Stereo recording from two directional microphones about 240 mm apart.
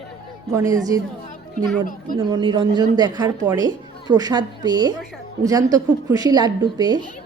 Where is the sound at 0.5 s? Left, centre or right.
Centre.